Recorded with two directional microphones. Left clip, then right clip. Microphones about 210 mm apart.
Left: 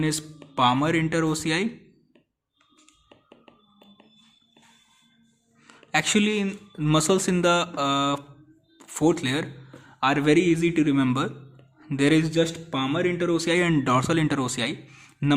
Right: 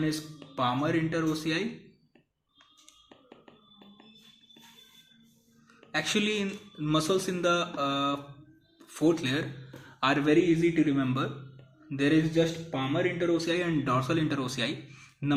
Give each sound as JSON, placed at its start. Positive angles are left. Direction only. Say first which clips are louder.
{"t": 0.5, "sound": "speech", "louder": "left 7 dB", "side_deg": 35}
{"t": 5.6, "sound": "a man's voice", "louder": "left 7 dB", "side_deg": 35}
{"t": 10.3, "sound": "speech", "louder": "left 3 dB", "side_deg": 50}